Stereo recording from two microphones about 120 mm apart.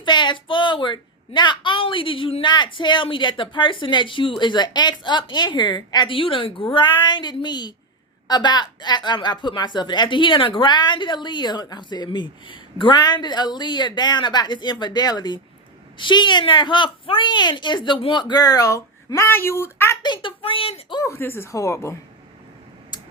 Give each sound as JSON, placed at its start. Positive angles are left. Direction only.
{"t": 0.0, "sound": "a woman's voice", "side_deg": 40}
{"t": 20.0, "sound": "speech", "side_deg": 40}
{"t": 21.0, "sound": "speech", "side_deg": 20}